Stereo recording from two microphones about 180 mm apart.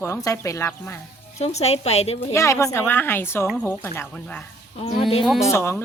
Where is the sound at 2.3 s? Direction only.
15° left (ahead or behind); by 5.4 s centre (ahead or behind).